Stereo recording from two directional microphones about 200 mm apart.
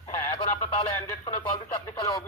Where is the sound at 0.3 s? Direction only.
30° left (ahead or behind).